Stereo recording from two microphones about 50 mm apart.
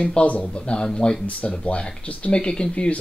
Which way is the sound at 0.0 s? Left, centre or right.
Centre.